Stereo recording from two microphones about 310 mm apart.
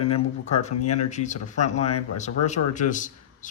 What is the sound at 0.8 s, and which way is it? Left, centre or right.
Speech, left.